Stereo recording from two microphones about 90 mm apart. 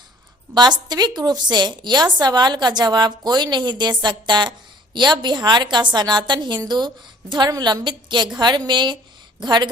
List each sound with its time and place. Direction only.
0.5 s a woman's voice: 55° right (ahead or behind)